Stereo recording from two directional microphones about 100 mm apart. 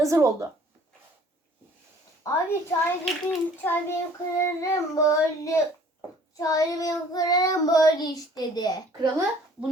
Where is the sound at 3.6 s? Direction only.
20° left (ahead or behind); by 8.8 s 40° left (ahead or behind).